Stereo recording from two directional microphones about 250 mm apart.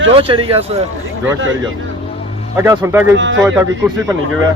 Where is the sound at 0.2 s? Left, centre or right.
Right.